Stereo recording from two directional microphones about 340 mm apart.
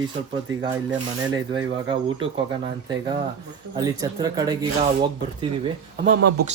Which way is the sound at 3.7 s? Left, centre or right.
Centre.